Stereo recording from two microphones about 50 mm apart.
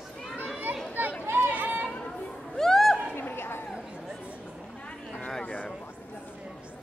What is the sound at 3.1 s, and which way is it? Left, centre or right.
Squeak, left.